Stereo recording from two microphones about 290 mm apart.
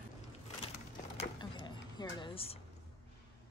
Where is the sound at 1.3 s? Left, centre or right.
Centre.